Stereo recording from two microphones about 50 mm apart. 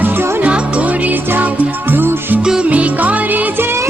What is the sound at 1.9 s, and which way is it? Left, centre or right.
Music, right.